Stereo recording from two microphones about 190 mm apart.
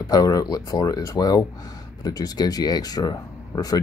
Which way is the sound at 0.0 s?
20° left (ahead or behind).